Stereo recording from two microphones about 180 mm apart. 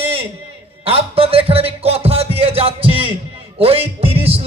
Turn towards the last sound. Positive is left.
turn(degrees=-30)  # may be behind; listen again after turning